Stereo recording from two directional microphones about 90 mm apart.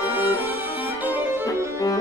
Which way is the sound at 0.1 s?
20° right (ahead or behind).